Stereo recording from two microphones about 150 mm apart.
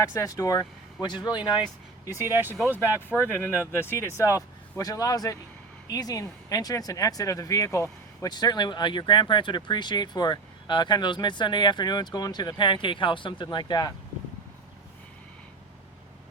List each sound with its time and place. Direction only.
0.0 s speech: 20° left (ahead or behind)
2.2 s speech: 15° right (ahead or behind)
3.2 s speech: 15° left (ahead or behind)